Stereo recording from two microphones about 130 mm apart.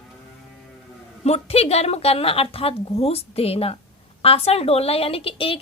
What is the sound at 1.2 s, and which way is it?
A woman's voice, 50° left (ahead or behind).